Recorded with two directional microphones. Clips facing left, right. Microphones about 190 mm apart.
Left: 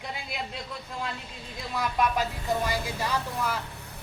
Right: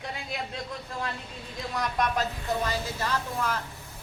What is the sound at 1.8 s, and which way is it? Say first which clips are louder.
A man's voice: left 2 dB; 5° left (ahead or behind).